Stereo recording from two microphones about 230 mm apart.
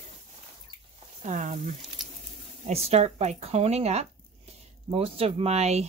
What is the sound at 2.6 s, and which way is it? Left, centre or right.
Speech, right.